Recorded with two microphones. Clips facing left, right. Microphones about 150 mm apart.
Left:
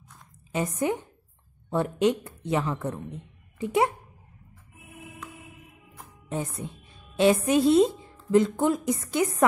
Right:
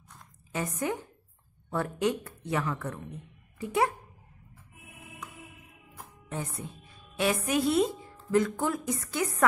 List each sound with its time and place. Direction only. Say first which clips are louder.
0.5 s a woman's voice: left 5 dB; 20° left (ahead or behind)
6.2 s a woman's voice: left 5 dB; 20° left (ahead or behind)